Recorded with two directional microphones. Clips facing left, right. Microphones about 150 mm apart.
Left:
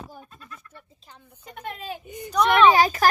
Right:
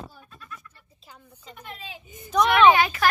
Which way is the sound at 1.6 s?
55° left (ahead or behind).